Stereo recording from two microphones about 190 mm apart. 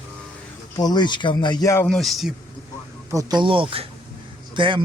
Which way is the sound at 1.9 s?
Centre (ahead or behind).